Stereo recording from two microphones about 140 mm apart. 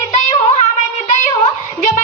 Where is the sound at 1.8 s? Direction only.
60° left (ahead or behind).